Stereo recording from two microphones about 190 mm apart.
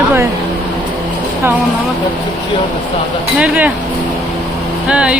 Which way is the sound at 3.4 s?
5° right (ahead or behind).